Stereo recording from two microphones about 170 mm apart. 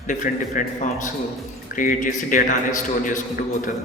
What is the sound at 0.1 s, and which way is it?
A man's voice, 50° left (ahead or behind).